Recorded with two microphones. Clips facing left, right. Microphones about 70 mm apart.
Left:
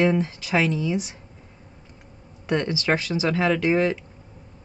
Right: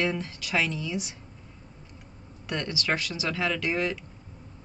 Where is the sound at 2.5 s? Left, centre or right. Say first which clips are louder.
Left 7 dB; left.